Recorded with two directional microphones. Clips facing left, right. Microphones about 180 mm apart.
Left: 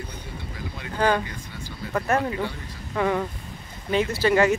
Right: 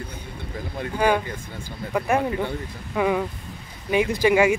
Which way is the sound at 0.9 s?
10° right (ahead or behind).